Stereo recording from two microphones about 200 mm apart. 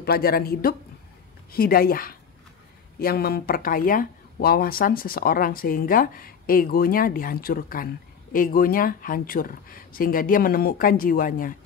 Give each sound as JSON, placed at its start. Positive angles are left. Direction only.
{"t": 0.0, "sound": "speech", "side_deg": 50}